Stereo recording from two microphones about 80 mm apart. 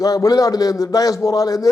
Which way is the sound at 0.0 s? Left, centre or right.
Left.